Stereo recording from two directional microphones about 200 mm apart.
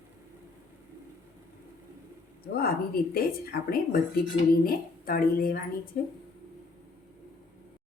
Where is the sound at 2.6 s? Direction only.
50° left (ahead or behind).